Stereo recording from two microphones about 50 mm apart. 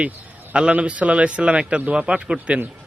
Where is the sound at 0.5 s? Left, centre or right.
Right.